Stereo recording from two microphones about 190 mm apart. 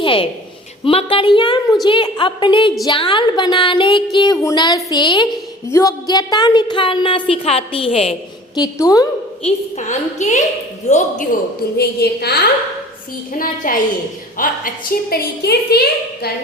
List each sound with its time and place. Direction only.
0.0 s a sound: 30° left (ahead or behind)
0.9 s speech: 30° left (ahead or behind)
8.5 s speech: 20° left (ahead or behind)
9.4 s a woman's voice: 40° left (ahead or behind)
11.8 s a woman's voice: 55° left (ahead or behind)
13.6 s a woman's voice: 45° left (ahead or behind)